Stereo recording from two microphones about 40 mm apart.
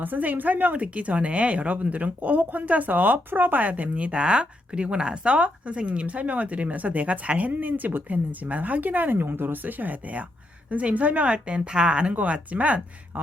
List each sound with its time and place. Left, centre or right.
0.0 s speech: right
3.2 s speech: right
12.1 s speech: right